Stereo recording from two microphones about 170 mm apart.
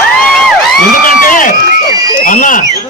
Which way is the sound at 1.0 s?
55° left (ahead or behind).